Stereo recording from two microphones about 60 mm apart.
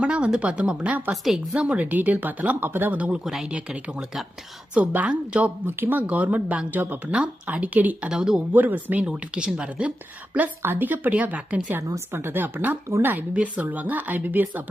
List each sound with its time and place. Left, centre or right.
0.0 s speech: centre
1.1 s a woman's voice: centre
1.5 s speech: centre
3.2 s a woman's voice: centre
3.5 s speech: centre
4.9 s speech: right
8.1 s speech: centre
8.5 s speech: right
9.0 s speech: centre
10.6 s speech: right
11.8 s speech: right
12.1 s speech: right
13.3 s speech: right